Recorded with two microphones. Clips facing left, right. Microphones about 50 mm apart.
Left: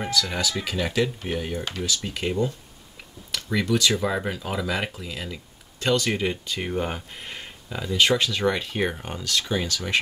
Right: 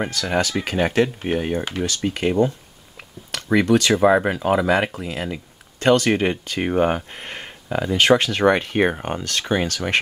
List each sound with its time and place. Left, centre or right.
0.1 s speech: right
3.4 s speech: right